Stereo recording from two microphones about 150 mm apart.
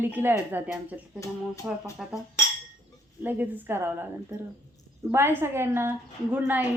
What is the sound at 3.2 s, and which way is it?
A woman's voice, 10° right (ahead or behind).